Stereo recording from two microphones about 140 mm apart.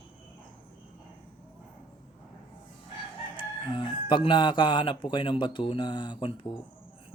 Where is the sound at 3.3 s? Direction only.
35° left (ahead or behind).